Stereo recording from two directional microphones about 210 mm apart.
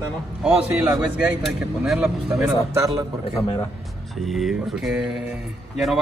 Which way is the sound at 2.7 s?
15° right (ahead or behind).